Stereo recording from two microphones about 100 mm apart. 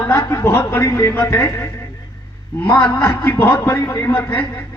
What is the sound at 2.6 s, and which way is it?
Speech, 40° left (ahead or behind).